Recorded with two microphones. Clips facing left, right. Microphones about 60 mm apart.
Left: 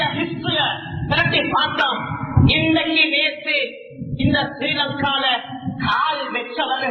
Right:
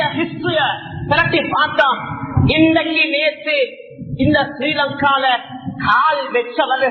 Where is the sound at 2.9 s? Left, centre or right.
Right.